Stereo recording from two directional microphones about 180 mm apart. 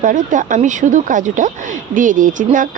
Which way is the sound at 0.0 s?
45° right (ahead or behind).